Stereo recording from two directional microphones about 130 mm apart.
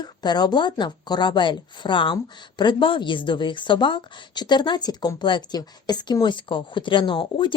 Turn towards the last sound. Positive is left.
turn(degrees=40)  # may be behind; listen again after turning